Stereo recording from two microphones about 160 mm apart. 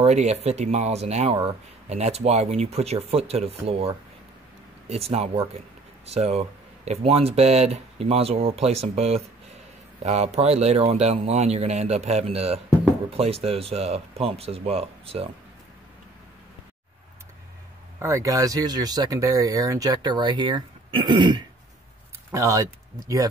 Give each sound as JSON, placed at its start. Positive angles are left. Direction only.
{"t": 0.0, "sound": "speech", "side_deg": -45}
{"t": 17.9, "sound": "speech", "side_deg": -20}